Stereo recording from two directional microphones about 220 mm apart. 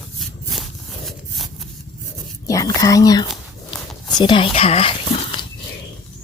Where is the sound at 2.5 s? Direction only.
15° left (ahead or behind).